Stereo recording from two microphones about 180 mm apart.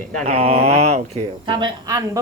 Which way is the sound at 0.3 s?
35° right (ahead or behind).